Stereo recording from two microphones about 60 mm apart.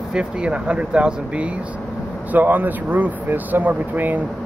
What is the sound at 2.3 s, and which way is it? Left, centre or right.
Speech, right.